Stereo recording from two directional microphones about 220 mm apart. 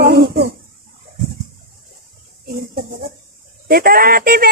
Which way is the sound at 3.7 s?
40° right (ahead or behind).